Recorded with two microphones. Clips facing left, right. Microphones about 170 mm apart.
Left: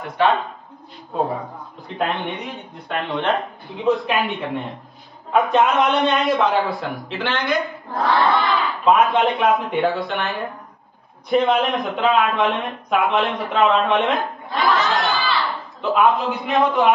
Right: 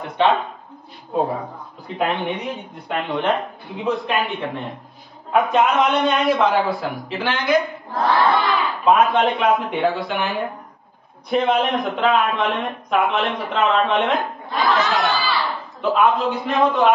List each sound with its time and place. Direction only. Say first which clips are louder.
0.2 s speech: right 1 dB; 25° right (ahead or behind)
1.4 s a man's voice: even; centre (ahead or behind)